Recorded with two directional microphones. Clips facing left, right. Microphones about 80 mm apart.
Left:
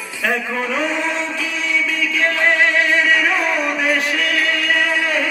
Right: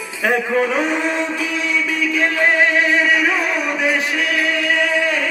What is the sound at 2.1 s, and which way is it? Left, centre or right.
Music, right.